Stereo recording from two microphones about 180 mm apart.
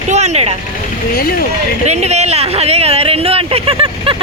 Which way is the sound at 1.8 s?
35° right (ahead or behind).